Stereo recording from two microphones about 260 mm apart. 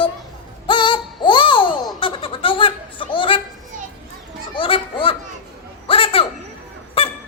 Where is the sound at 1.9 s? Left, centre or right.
Centre.